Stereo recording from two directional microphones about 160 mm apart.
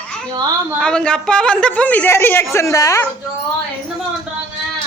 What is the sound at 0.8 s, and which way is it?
A woman's voice, 5° left (ahead or behind).